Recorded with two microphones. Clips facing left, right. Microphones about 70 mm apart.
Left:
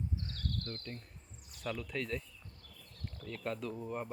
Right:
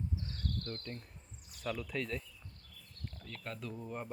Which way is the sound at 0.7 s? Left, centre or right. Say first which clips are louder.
Right 1 dB; centre.